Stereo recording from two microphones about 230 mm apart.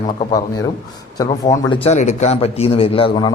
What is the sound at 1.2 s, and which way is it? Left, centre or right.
A man's voice, centre.